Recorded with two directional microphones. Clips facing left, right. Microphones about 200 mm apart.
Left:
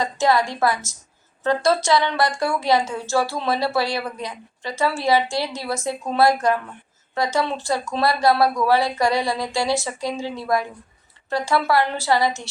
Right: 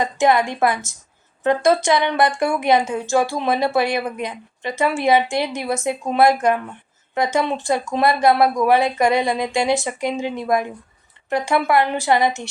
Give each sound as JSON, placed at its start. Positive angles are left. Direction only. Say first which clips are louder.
{"t": 0.0, "sound": "a woman's voice", "louder": "right 2 dB", "side_deg": -20}